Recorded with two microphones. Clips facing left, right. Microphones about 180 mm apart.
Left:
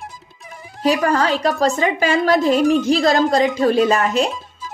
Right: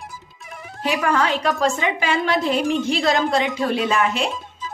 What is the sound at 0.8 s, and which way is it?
A woman's voice, 40° left (ahead or behind).